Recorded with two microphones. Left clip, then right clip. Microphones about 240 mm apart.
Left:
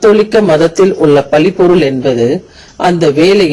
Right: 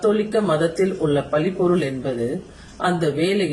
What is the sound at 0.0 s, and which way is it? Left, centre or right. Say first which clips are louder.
A man's voice: left 12 dB; left.